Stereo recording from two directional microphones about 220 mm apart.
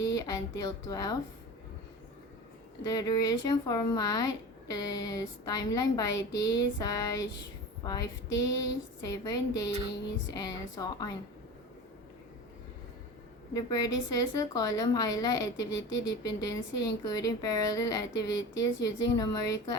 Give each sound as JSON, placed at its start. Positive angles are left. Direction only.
{"t": 0.0, "sound": "a woman's voice", "side_deg": 15}
{"t": 2.8, "sound": "a woman's voice", "side_deg": 15}
{"t": 13.5, "sound": "a woman's voice", "side_deg": 15}